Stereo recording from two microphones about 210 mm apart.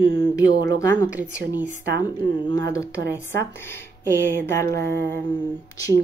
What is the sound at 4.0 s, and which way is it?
Speech, 10° left (ahead or behind).